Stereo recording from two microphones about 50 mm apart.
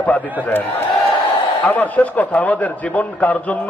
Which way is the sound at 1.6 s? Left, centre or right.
Left.